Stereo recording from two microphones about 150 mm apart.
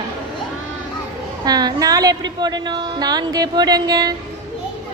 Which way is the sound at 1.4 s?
25° right (ahead or behind).